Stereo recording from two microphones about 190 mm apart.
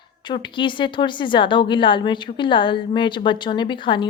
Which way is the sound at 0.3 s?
25° left (ahead or behind).